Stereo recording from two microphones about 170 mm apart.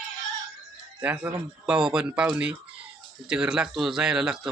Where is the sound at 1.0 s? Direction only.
10° right (ahead or behind).